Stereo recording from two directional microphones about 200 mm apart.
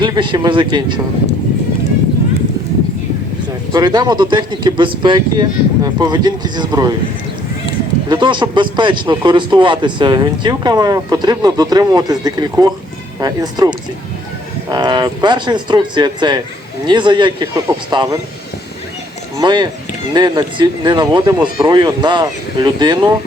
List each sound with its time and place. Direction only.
0.0 s speech: 25° right (ahead or behind)
3.7 s speech: 20° right (ahead or behind)
8.1 s speech: 25° right (ahead or behind)
14.7 s speech: 20° right (ahead or behind)
19.4 s speech: 20° right (ahead or behind)